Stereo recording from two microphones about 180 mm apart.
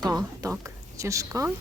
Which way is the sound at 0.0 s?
20° right (ahead or behind).